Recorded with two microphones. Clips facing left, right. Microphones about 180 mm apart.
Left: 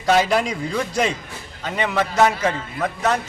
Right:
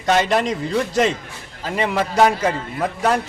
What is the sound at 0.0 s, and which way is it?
A man's voice, centre (ahead or behind).